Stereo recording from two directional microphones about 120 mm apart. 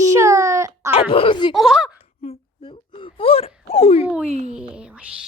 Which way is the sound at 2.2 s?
50° left (ahead or behind).